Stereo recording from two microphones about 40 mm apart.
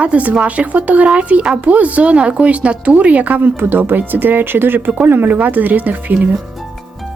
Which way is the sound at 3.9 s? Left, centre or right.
Right.